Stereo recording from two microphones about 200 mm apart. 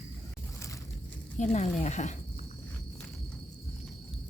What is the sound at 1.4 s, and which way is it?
Speech, 35° left (ahead or behind).